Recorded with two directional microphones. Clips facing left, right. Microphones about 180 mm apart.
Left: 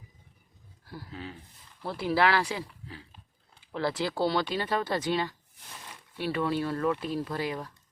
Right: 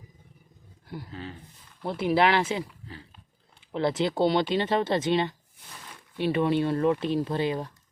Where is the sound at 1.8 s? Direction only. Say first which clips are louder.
Right 3 dB; 20° right (ahead or behind).